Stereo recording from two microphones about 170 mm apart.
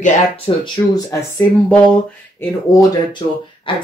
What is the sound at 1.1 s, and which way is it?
Speech, 15° left (ahead or behind).